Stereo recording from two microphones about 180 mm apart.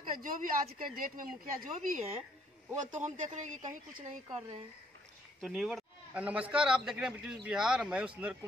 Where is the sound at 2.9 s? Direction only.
40° right (ahead or behind).